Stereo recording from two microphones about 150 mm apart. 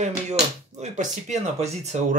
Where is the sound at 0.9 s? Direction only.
45° right (ahead or behind).